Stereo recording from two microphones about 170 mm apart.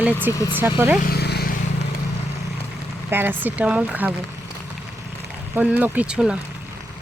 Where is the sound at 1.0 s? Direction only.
70° left (ahead or behind).